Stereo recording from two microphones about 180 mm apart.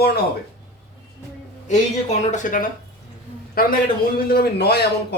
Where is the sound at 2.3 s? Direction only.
45° left (ahead or behind).